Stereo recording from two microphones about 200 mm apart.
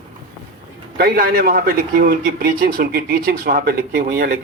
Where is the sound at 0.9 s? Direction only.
50° right (ahead or behind).